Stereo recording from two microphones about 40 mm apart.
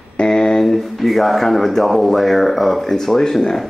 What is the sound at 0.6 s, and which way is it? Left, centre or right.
Speech, centre.